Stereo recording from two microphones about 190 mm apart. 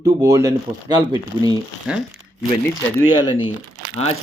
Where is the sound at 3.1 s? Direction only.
25° left (ahead or behind).